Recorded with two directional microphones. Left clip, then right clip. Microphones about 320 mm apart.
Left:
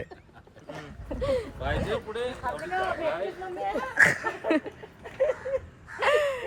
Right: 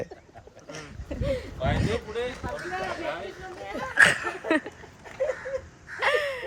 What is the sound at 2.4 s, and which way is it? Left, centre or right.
Speech, centre.